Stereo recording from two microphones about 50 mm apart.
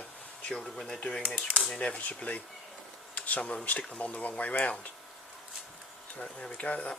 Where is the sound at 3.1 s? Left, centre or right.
Left.